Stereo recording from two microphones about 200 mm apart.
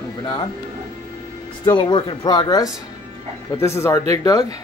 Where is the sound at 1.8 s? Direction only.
25° left (ahead or behind).